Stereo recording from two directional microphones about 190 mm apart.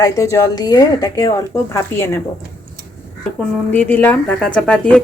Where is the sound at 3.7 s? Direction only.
10° left (ahead or behind).